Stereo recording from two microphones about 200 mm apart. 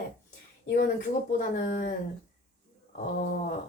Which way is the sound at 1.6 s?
50° left (ahead or behind).